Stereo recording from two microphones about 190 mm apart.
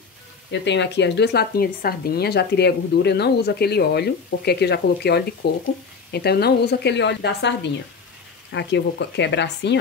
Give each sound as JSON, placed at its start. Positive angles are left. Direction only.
{"t": 0.5, "sound": "speech", "side_deg": 65}